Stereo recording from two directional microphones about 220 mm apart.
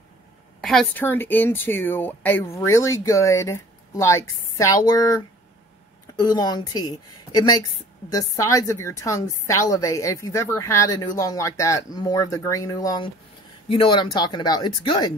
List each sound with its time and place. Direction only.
0.6 s a woman's voice: centre (ahead or behind); by 15.1 s 20° left (ahead or behind)